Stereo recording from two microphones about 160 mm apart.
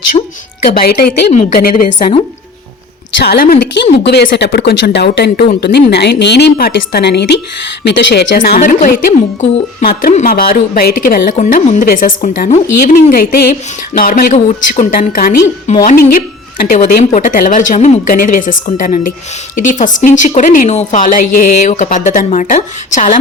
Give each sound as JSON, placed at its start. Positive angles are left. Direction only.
{"t": 0.6, "sound": "a woman's voice", "side_deg": 70}
{"t": 1.5, "sound": "speech", "side_deg": 65}
{"t": 3.2, "sound": "speech", "side_deg": 70}
{"t": 8.4, "sound": "a woman's voice", "side_deg": 60}
{"t": 11.4, "sound": "speech", "side_deg": 55}
{"t": 15.7, "sound": "a woman's voice", "side_deg": 45}